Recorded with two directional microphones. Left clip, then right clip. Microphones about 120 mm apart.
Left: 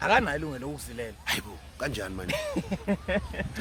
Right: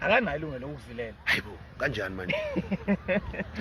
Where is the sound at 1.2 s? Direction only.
25° left (ahead or behind).